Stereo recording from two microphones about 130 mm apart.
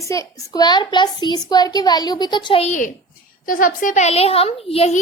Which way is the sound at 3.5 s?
90° left.